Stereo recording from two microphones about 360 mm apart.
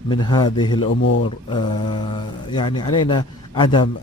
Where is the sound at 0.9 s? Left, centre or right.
Left.